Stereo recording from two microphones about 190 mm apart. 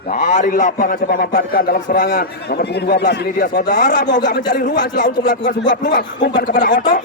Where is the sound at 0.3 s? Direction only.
40° left (ahead or behind).